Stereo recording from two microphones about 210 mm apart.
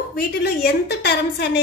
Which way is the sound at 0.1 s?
50° left (ahead or behind).